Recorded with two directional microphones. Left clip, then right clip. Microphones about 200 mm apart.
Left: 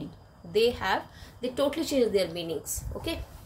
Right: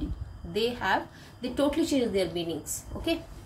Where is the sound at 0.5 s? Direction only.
45° left (ahead or behind).